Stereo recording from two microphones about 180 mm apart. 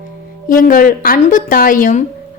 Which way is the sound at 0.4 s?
50° left (ahead or behind).